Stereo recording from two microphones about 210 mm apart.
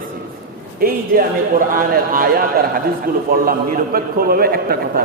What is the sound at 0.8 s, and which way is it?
A man's voice, 45° right (ahead or behind).